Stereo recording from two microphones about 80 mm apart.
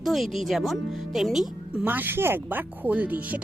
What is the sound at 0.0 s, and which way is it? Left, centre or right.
Speech, centre.